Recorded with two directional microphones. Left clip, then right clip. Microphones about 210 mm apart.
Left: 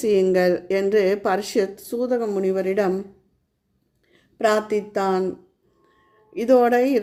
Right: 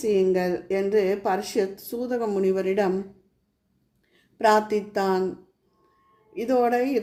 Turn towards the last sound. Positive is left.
turn(degrees=35)  # may be behind; listen again after turning